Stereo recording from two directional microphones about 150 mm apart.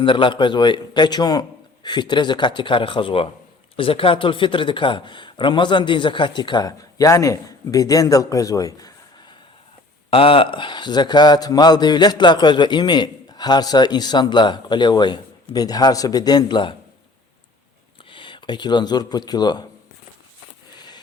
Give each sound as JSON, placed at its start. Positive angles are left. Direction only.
{"t": 0.0, "sound": "speech", "side_deg": 35}
{"t": 10.1, "sound": "speech", "side_deg": 40}
{"t": 18.1, "sound": "speech", "side_deg": 35}
{"t": 20.7, "sound": "a sound", "side_deg": 30}